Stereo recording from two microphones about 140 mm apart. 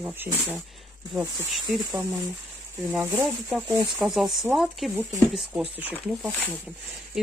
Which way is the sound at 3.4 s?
5° right (ahead or behind).